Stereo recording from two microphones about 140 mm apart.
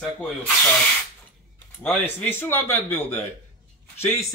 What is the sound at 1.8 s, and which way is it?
Speech, 10° left (ahead or behind).